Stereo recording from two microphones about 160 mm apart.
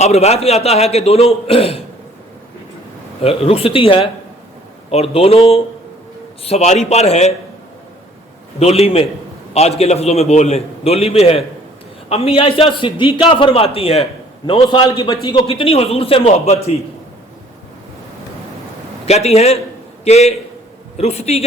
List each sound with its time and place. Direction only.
0.0 s a man's voice: 40° left (ahead or behind)
3.2 s a man's voice: 40° left (ahead or behind)
8.5 s a man's voice: 40° left (ahead or behind); by 15.4 s 25° left (ahead or behind)
15.4 s a man's voice: 35° left (ahead or behind)
19.0 s a man's voice: 40° left (ahead or behind)